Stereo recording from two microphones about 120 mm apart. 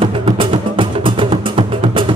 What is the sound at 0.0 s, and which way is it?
Music, 45° right (ahead or behind).